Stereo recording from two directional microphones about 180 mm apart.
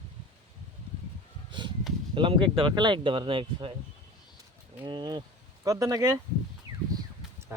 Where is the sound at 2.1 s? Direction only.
30° right (ahead or behind).